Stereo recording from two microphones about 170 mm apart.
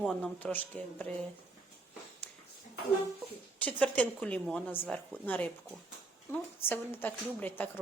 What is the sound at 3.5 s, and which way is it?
Speech, 10° left (ahead or behind).